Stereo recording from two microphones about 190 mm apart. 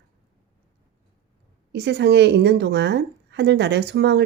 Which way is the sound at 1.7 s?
65° right (ahead or behind).